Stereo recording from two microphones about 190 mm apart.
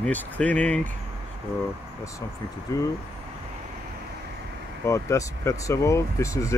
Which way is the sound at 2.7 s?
15° left (ahead or behind).